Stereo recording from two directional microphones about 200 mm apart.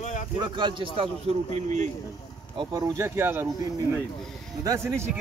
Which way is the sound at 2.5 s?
20° right (ahead or behind).